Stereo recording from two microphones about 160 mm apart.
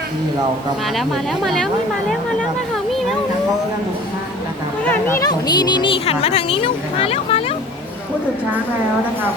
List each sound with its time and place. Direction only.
0.9 s speech: centre (ahead or behind)
4.9 s speech: 15° left (ahead or behind); by 7.5 s 40° left (ahead or behind)